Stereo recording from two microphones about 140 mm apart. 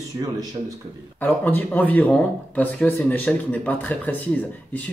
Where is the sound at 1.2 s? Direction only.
15° left (ahead or behind).